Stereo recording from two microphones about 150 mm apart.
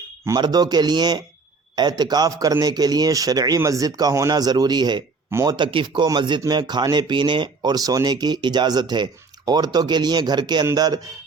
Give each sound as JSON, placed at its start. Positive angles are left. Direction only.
{"t": 0.3, "sound": "speech", "side_deg": -30}
{"t": 5.5, "sound": "speech", "side_deg": -35}